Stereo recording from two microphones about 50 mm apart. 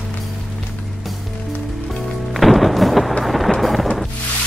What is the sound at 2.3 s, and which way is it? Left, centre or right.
Music, centre.